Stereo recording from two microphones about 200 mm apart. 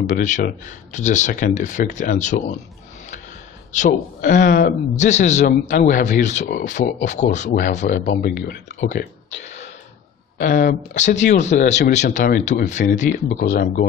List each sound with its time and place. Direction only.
0.2 s a man's voice: 40° left (ahead or behind)
3.7 s a man's voice: 40° left (ahead or behind)
10.3 s a man's voice: 45° left (ahead or behind)
13.3 s speech: 45° left (ahead or behind)